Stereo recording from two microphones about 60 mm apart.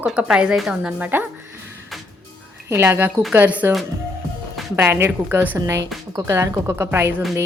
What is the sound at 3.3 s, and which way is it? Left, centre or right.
Speech, right.